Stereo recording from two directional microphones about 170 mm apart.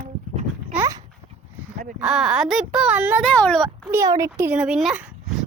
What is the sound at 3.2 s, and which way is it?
Speech, 5° left (ahead or behind).